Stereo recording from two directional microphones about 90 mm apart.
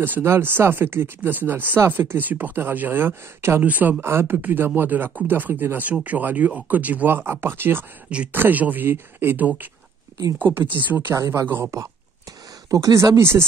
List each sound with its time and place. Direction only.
0.0 s speech: 25° right (ahead or behind)
8.1 s speech: 10° right (ahead or behind)
11.1 s speech: 30° right (ahead or behind)